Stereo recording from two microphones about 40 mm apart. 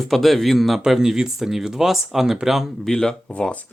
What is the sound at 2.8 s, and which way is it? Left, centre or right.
Speech, centre.